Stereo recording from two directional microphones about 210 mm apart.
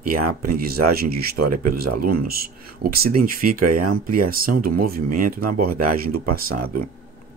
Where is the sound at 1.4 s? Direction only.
90° right.